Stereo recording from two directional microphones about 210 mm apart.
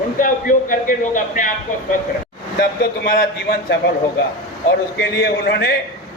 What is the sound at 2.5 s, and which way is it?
Speech, 45° left (ahead or behind).